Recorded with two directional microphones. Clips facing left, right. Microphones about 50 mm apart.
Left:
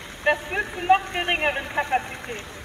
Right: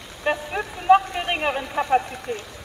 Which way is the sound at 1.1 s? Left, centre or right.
Left.